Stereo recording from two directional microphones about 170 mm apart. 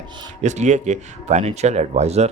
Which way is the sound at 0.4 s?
45° right (ahead or behind).